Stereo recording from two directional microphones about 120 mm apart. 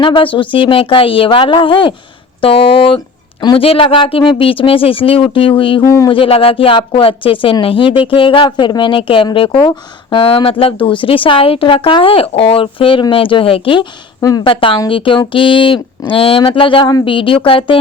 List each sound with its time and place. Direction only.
0.0 s speech: 45° left (ahead or behind)
5.8 s speech: 25° left (ahead or behind)
6.1 s speech: 50° left (ahead or behind)
14.2 s a woman's voice: 30° left (ahead or behind)
14.4 s speech: 45° left (ahead or behind)